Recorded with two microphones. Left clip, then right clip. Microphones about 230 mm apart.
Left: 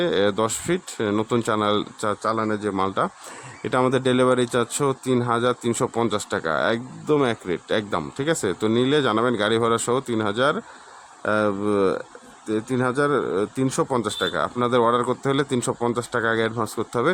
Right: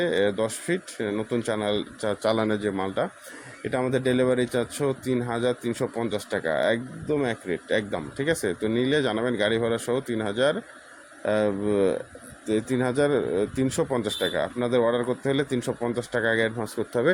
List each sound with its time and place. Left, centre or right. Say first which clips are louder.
0.0 s speech: left 3 dB; centre